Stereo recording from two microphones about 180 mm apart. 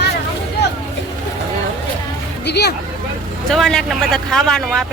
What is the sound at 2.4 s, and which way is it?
Speech, 65° left (ahead or behind).